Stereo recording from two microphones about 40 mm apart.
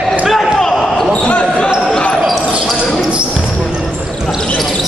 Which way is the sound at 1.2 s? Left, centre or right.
Left.